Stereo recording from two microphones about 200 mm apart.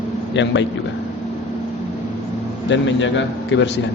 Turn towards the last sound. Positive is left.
turn(degrees=65)  # may be behind; listen again after turning